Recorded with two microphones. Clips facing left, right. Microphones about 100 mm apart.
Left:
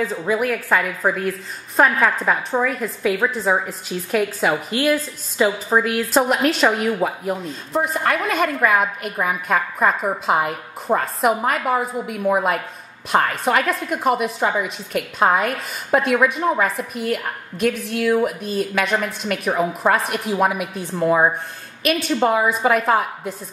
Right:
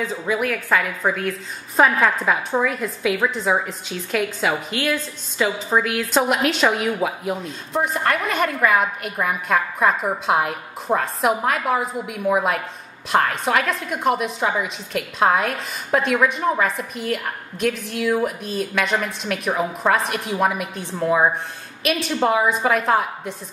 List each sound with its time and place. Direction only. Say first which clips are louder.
0.0 s a woman's voice: left 2 dB; centre (ahead or behind)